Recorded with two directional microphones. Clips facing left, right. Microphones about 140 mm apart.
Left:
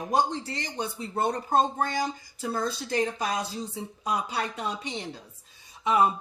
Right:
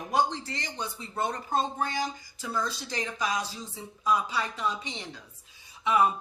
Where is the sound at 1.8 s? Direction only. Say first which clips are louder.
Left 3 dB; 55° left (ahead or behind).